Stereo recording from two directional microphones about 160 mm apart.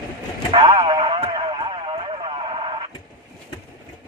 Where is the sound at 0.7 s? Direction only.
30° right (ahead or behind).